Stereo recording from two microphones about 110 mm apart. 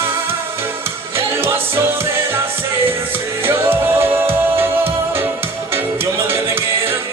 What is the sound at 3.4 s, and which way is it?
Music, 20° right (ahead or behind).